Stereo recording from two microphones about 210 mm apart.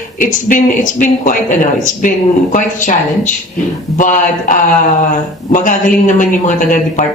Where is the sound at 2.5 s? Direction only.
35° left (ahead or behind).